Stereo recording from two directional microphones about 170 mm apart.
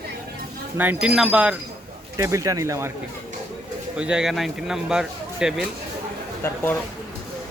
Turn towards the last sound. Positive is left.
turn(degrees=15)  # may be behind; listen again after turning